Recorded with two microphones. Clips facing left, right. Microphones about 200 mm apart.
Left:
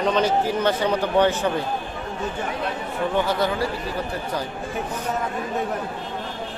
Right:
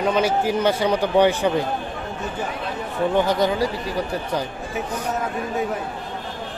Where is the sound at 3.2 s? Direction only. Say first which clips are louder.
Right 3 dB; 15° right (ahead or behind).